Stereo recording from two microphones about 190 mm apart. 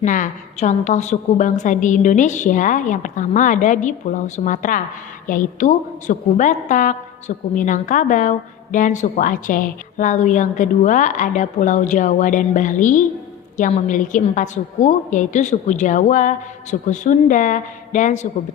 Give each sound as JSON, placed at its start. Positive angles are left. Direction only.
{"t": 0.0, "sound": "a woman's voice", "side_deg": 40}